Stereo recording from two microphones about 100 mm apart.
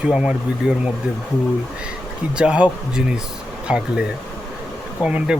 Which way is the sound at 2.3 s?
10° right (ahead or behind).